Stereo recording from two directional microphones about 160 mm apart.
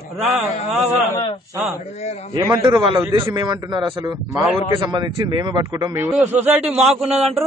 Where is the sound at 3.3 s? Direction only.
25° right (ahead or behind).